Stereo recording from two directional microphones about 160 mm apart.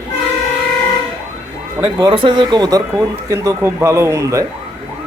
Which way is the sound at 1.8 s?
30° right (ahead or behind).